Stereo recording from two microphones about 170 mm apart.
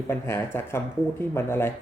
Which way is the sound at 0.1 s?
15° left (ahead or behind).